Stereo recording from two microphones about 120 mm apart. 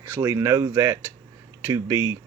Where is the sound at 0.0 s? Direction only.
20° right (ahead or behind).